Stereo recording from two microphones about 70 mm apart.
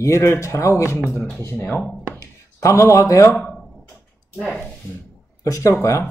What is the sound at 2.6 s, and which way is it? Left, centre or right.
Speech, left.